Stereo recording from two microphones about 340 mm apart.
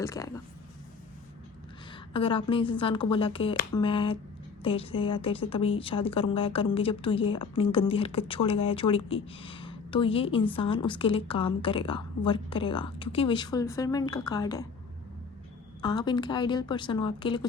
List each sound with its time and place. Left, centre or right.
0.0 s a woman's voice: centre
1.9 s a woman's voice: centre
15.8 s a woman's voice: centre